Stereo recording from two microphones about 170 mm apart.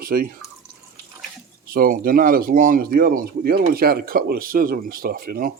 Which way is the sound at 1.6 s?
60° right (ahead or behind).